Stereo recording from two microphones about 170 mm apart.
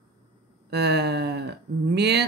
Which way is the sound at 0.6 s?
75° right (ahead or behind).